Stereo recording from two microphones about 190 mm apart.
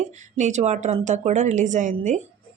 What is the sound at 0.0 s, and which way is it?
A woman's voice, 40° right (ahead or behind).